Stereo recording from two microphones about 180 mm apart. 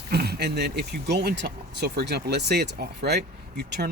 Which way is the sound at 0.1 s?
60° right (ahead or behind).